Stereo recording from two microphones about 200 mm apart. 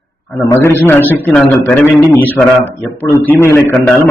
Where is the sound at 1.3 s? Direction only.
5° left (ahead or behind).